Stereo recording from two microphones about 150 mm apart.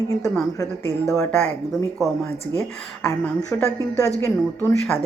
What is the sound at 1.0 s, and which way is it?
Speech, 5° left (ahead or behind).